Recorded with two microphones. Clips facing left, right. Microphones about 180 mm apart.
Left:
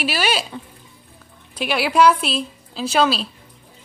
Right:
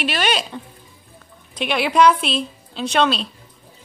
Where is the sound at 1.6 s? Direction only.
5° left (ahead or behind).